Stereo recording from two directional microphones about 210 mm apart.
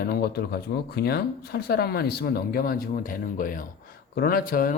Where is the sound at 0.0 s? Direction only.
45° left (ahead or behind).